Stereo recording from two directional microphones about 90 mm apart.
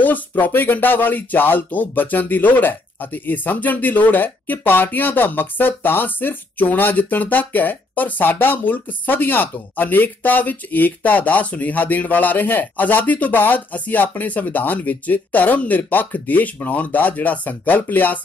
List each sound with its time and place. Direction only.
0.0 s speech: 20° left (ahead or behind)